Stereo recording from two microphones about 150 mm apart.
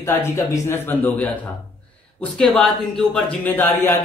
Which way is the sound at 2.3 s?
5° left (ahead or behind).